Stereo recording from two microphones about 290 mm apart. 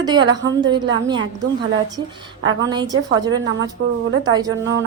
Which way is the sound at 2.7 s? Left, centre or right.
Centre.